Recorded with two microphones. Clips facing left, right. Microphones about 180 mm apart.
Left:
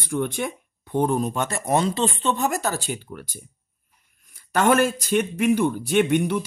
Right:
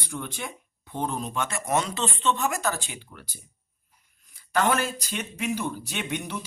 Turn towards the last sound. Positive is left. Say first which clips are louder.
# left 12 dB
turn(degrees=50)  # may be behind; listen again after turning